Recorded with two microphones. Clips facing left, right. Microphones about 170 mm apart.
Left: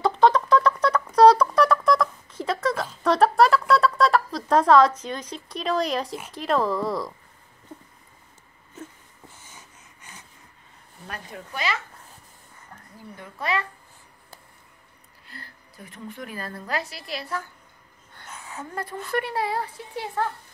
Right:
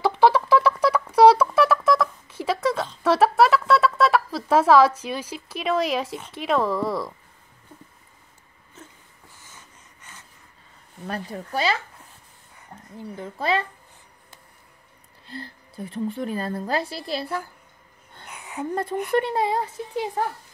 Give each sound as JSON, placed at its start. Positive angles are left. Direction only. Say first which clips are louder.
{"t": 0.0, "sound": "a sound", "louder": "right 1 dB", "side_deg": -5}
{"t": 2.9, "sound": "speech", "louder": "even", "side_deg": -5}
{"t": 11.1, "sound": "speech", "louder": "right 7 dB", "side_deg": -35}
{"t": 12.9, "sound": "speech", "louder": "right 8 dB", "side_deg": -25}
{"t": 15.2, "sound": "a woman's voice", "louder": "right 9 dB", "side_deg": -25}
{"t": 18.1, "sound": "a sound", "louder": "right 4 dB", "side_deg": -15}
{"t": 18.8, "sound": "speech", "louder": "right 5 dB", "side_deg": -20}